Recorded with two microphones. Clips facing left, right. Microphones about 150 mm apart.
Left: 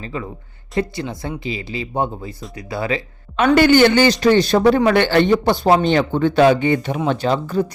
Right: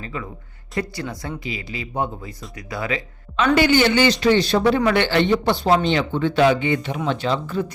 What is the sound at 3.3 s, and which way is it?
Speech, 50° left (ahead or behind).